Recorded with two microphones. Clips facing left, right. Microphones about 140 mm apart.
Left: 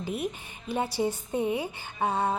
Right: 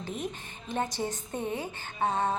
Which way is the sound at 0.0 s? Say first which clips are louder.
Left 4 dB; 10° left (ahead or behind).